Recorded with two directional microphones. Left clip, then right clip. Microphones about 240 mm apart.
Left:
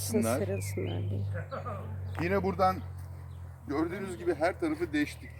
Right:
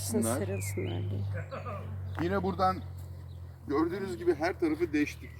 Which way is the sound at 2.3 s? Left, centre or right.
Centre.